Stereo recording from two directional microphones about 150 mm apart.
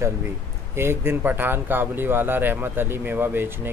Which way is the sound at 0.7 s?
15° right (ahead or behind).